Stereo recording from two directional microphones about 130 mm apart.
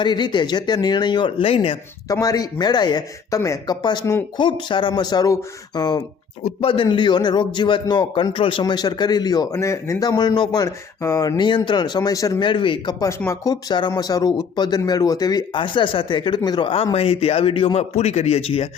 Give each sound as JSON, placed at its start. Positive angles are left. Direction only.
{"t": 0.0, "sound": "speech", "side_deg": 35}
{"t": 2.2, "sound": "speech", "side_deg": 30}
{"t": 6.4, "sound": "speech", "side_deg": 45}
{"t": 8.6, "sound": "speech", "side_deg": 30}
{"t": 12.4, "sound": "speech", "side_deg": 40}
{"t": 13.1, "sound": "speech", "side_deg": 20}